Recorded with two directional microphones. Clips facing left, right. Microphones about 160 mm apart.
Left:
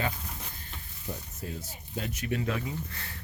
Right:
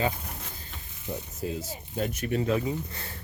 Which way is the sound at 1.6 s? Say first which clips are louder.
Right 6 dB; 45° right (ahead or behind).